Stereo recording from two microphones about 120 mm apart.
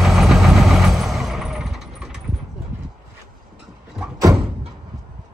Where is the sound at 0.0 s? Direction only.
5° right (ahead or behind).